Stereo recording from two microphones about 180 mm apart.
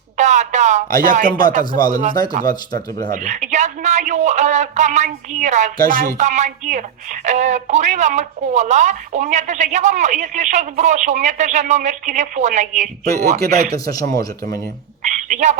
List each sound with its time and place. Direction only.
0.2 s speech: 40° right (ahead or behind)
0.9 s speech: 50° right (ahead or behind)
2.5 s speech: 25° left (ahead or behind)
3.1 s speech: 45° right (ahead or behind)
13.4 s speech: 60° right (ahead or behind)
13.7 s speech: 20° left (ahead or behind)
15.0 s a sound: 45° right (ahead or behind)